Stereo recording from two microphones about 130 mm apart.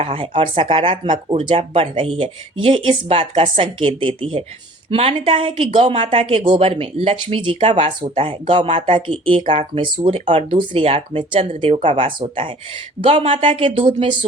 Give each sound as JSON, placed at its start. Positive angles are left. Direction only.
{"t": 0.0, "sound": "speech", "side_deg": -45}